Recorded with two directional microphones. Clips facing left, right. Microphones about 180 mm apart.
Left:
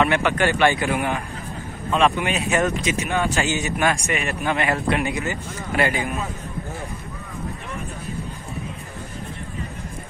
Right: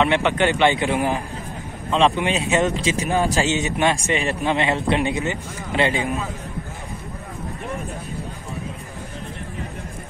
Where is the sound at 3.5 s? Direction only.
25° right (ahead or behind).